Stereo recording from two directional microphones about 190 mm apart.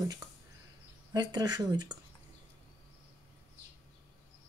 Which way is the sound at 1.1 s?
20° right (ahead or behind).